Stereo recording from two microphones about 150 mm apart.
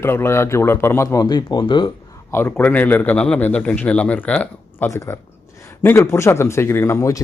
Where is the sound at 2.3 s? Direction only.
15° left (ahead or behind).